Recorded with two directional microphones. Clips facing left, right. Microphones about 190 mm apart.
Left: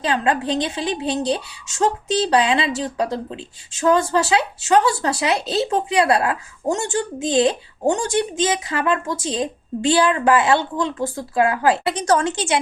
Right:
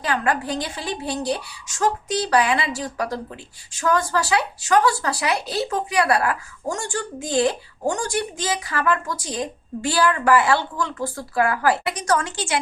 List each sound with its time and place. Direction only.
0.0 s a woman's voice: 25° left (ahead or behind)